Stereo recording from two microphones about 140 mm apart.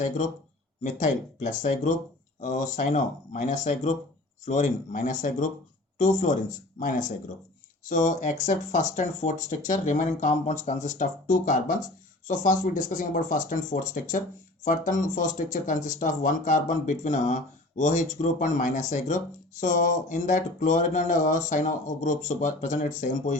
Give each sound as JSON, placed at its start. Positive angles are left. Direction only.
{"t": 0.9, "sound": "speech", "side_deg": 65}